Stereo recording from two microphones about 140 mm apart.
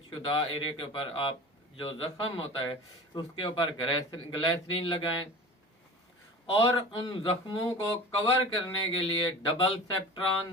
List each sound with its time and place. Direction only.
0.1 s speech: 35° left (ahead or behind)
6.5 s speech: 35° left (ahead or behind)